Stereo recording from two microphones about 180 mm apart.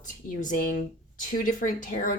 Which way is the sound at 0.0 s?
45° left (ahead or behind).